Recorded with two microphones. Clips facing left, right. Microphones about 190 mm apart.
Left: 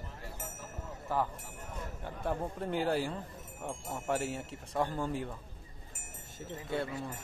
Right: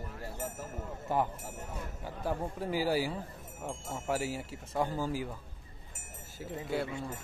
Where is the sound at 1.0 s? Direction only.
20° right (ahead or behind).